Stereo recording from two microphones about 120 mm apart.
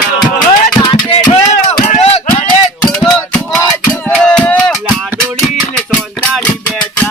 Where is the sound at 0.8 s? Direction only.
35° left (ahead or behind).